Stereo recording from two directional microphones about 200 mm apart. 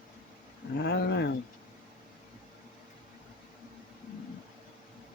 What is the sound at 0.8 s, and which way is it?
Speech, 60° left (ahead or behind).